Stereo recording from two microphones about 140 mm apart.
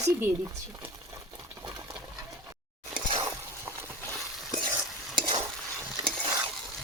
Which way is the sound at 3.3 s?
20° right (ahead or behind).